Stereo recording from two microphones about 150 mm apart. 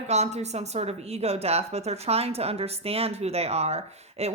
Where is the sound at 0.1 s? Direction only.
50° right (ahead or behind).